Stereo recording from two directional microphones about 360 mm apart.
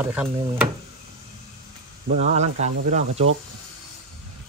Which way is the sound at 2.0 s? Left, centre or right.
Centre.